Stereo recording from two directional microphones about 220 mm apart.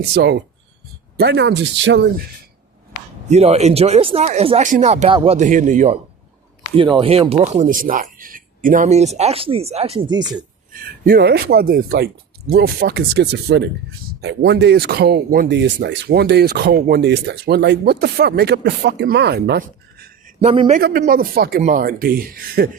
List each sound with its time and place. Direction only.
0.1 s speech: 50° right (ahead or behind)
3.2 s speech: 30° right (ahead or behind)
6.7 s speech: 25° right (ahead or behind)
10.7 s speech: 40° right (ahead or behind)
20.2 s a man's voice: 30° right (ahead or behind)
20.7 s speech: 40° right (ahead or behind)